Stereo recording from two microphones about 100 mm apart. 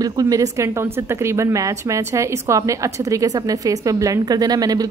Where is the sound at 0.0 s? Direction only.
35° right (ahead or behind).